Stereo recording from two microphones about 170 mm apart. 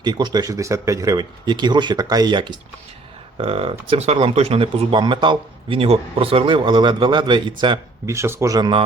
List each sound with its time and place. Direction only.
0.0 s speech: 25° right (ahead or behind)